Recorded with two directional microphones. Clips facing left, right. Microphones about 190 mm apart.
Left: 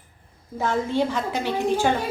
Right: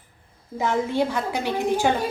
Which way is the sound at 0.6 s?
15° right (ahead or behind).